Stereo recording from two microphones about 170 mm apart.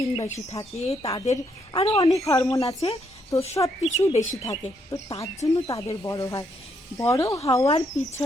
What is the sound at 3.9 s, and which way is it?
Speech, 40° left (ahead or behind).